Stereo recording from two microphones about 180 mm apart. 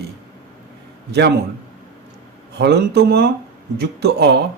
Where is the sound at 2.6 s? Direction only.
65° right (ahead or behind).